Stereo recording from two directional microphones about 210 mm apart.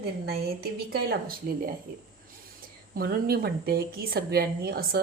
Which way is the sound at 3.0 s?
45° right (ahead or behind).